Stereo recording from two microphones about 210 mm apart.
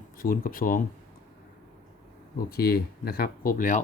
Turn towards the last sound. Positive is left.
turn(degrees=40)  # may be behind; listen again after turning